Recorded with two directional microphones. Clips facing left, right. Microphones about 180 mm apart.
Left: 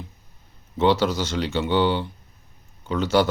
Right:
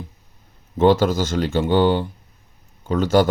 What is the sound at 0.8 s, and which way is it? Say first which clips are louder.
Speech: right 4 dB; 50° right (ahead or behind).